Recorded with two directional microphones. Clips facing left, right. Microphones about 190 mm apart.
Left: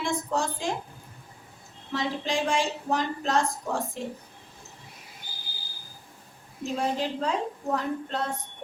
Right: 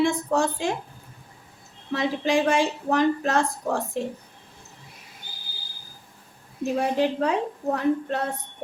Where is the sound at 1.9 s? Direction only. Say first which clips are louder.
Right 6 dB; 60° right (ahead or behind).